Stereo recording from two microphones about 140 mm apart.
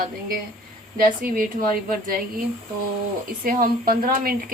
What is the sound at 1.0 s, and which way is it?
Speech, 90° right.